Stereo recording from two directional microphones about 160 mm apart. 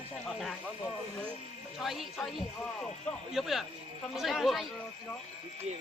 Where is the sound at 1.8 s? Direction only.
Centre (ahead or behind).